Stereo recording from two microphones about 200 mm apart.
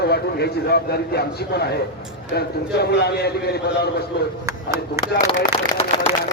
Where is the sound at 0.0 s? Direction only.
55° left (ahead or behind).